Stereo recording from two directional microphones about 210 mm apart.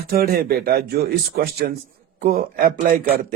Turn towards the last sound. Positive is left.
turn(degrees=-40)  # may be behind; listen again after turning